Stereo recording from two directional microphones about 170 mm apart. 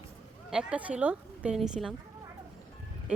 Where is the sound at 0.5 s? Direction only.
10° right (ahead or behind).